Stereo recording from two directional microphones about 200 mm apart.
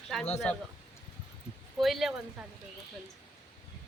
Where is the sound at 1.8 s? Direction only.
Centre (ahead or behind).